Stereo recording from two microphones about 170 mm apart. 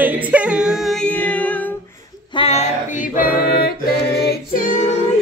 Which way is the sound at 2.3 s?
35° left (ahead or behind).